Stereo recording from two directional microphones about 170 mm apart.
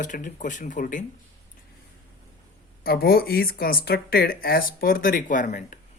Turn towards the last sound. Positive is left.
turn(degrees=50)  # may be behind; listen again after turning